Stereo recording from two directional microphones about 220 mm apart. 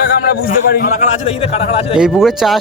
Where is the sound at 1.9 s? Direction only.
5° right (ahead or behind).